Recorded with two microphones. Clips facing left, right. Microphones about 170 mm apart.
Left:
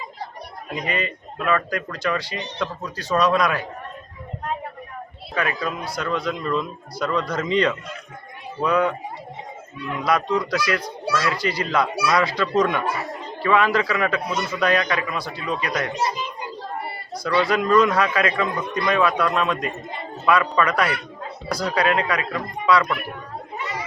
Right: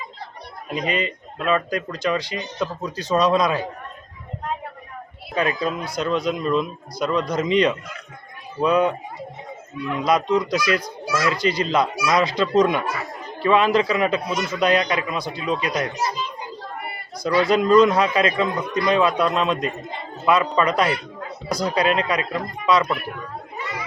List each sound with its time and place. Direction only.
0.9 s a man's voice: 20° right (ahead or behind)
5.3 s a man's voice: 20° right (ahead or behind)
10.0 s a man's voice: 20° right (ahead or behind)
16.0 s a child's voice: 20° left (ahead or behind)
17.4 s a man's voice: 20° right (ahead or behind)